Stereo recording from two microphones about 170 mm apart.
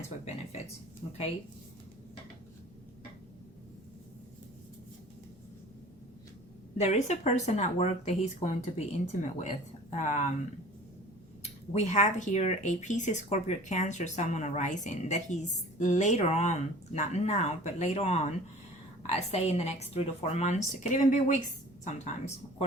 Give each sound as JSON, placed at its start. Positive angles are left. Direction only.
{"t": 6.7, "sound": "speech", "side_deg": 40}
{"t": 11.7, "sound": "speech", "side_deg": 45}